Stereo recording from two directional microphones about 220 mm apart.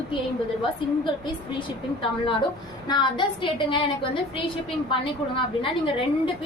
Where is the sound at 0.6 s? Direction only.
20° left (ahead or behind).